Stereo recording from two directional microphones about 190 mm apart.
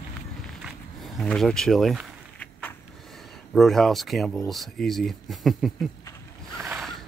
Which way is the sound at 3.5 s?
Centre (ahead or behind).